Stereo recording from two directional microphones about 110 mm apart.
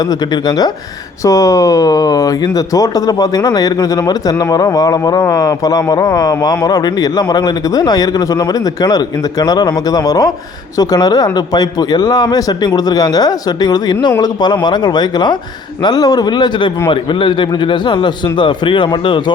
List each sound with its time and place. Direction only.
0.0 s a man's voice: 40° left (ahead or behind)